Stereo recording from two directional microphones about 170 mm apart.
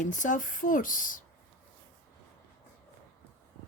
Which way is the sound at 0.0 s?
50° left (ahead or behind).